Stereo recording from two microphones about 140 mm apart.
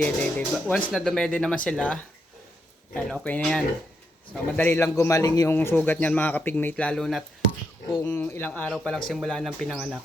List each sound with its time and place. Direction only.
0.0 s a man's voice: 5° left (ahead or behind); by 5.5 s 25° left (ahead or behind)
5.5 s speech: 15° left (ahead or behind)